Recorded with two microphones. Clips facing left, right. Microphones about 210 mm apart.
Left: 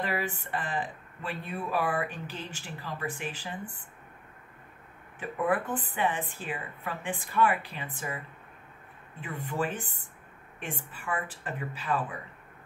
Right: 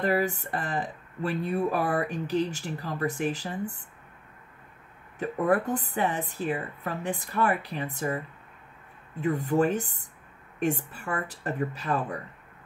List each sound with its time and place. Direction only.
0.0 s speech: 40° right (ahead or behind)
5.4 s a woman's voice: 40° right (ahead or behind)
9.2 s a woman's voice: 40° right (ahead or behind)